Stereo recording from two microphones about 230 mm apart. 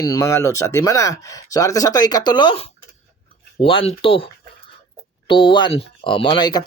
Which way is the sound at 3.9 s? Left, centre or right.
Left.